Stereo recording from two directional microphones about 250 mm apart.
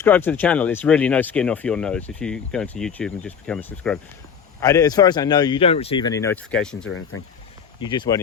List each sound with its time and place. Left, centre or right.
0.0 s a man's voice: centre
6.8 s speech: left
7.8 s a man's voice: centre